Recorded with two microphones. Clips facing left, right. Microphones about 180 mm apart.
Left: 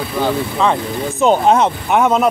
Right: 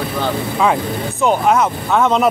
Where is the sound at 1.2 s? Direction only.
30° left (ahead or behind).